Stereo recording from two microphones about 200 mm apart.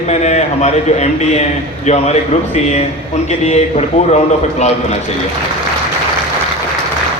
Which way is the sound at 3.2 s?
35° left (ahead or behind).